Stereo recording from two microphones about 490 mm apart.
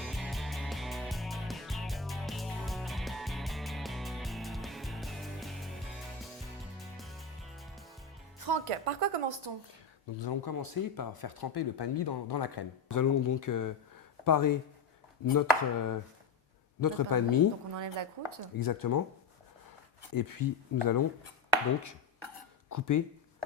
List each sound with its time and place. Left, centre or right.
0.0 s music: centre
8.4 s speech: right
9.5 s speech: right
10.2 s speech: left
10.5 s speech: left
12.9 s speech: left
18.5 s speech: left
20.1 s speech: left
22.7 s speech: left